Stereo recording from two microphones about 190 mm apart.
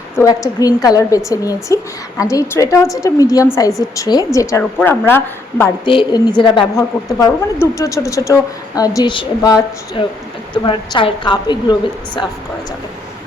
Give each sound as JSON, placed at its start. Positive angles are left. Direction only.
{"t": 0.2, "sound": "a woman's voice", "side_deg": 20}
{"t": 5.8, "sound": "a woman's voice", "side_deg": 25}